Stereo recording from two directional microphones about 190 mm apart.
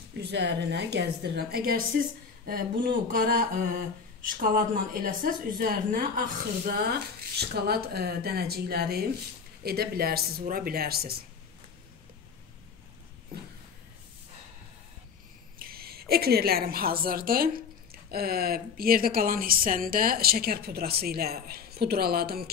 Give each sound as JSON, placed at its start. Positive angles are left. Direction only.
{"t": 0.2, "sound": "a woman's voice", "side_deg": -65}
{"t": 15.6, "sound": "speech", "side_deg": -55}